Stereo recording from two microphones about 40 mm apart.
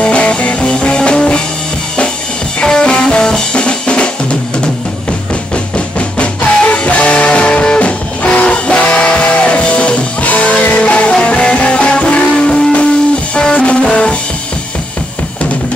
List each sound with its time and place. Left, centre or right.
0.0 s music: left
0.7 s music: left
2.6 s music: left
3.6 s drum: left
5.9 s music: left
8.2 s train: left
8.9 s music: left
11.1 s music: left